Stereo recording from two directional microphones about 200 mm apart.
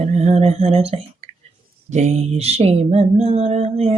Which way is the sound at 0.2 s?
30° right (ahead or behind).